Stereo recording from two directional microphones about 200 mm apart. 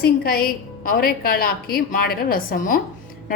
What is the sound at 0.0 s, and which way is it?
A woman's voice, 50° left (ahead or behind).